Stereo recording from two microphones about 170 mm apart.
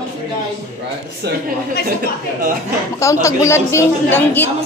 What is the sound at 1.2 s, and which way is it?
Speech, 75° right (ahead or behind).